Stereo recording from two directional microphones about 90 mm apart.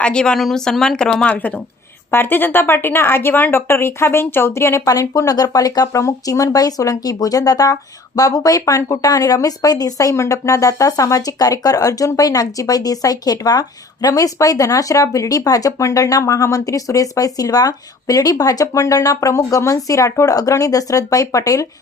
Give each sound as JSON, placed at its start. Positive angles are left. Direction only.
{"t": 0.0, "sound": "a woman's voice", "side_deg": 10}